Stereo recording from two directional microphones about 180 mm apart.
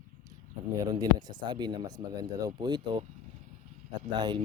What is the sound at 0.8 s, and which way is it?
Speech, 20° right (ahead or behind).